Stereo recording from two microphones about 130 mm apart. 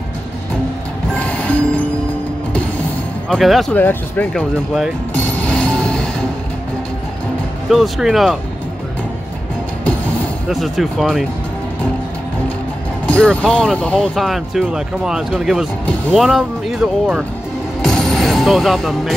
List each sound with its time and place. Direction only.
1.1 s music: 10° left (ahead or behind)
3.3 s speech: centre (ahead or behind)
3.7 s speech: 10° left (ahead or behind)
5.1 s music: 10° left (ahead or behind)
7.7 s speech: 5° right (ahead or behind)
10.5 s speech: centre (ahead or behind)
13.0 s vehicle: 10° left (ahead or behind)
13.5 s speech: 5° left (ahead or behind)
17.8 s speech: 5° left (ahead or behind)